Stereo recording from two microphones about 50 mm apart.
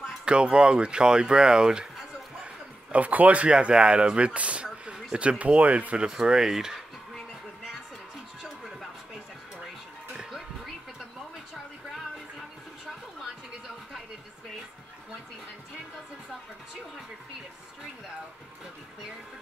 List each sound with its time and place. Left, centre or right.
0.2 s speech: centre
2.4 s a sound: right
3.4 s speech: centre
4.8 s a sound: right
5.4 s speech: right; by 6.8 s centre
10.1 s music: centre